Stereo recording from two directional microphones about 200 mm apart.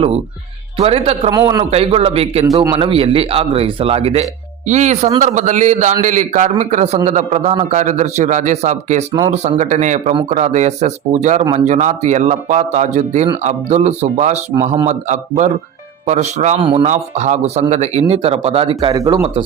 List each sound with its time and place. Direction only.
0.8 s a man's voice: 30° right (ahead or behind)